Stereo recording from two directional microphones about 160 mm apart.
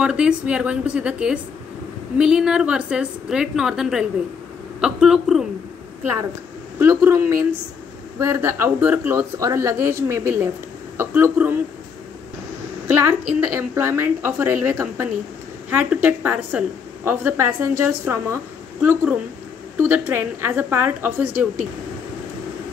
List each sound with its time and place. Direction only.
0.0 s a woman's voice: 5° right (ahead or behind)
6.8 s a woman's voice: 15° right (ahead or behind)
12.8 s a woman's voice: 15° right (ahead or behind)